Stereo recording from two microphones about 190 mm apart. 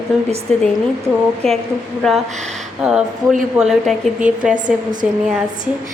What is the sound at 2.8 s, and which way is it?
A woman's voice, 5° right (ahead or behind).